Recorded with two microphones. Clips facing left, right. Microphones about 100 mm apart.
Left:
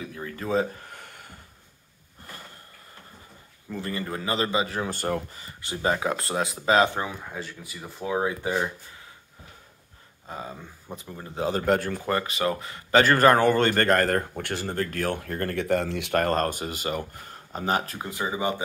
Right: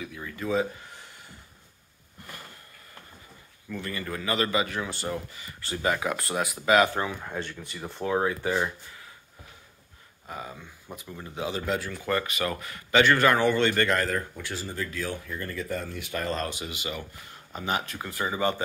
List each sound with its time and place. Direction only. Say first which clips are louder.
0.0 s speech: left 1 dB; 35° left (ahead or behind)
0.8 s a sound: left 3 dB; 55° left (ahead or behind)
3.7 s speech: left 2 dB; 30° left (ahead or behind); by 5.2 s 55° left (ahead or behind)
5.8 s speech: left 2 dB; 30° left (ahead or behind)
7.2 s speech: right 2 dB; 5° left (ahead or behind)
8.3 s speech: even; 20° left (ahead or behind)
10.2 s speech: left 2 dB; 30° left (ahead or behind); by 12.0 s 50° left (ahead or behind)
12.0 s speech: left 2 dB; 30° left (ahead or behind)
12.9 s speech: left 3 dB; 40° left (ahead or behind)
17.9 s speech: left 1 dB; 20° left (ahead or behind)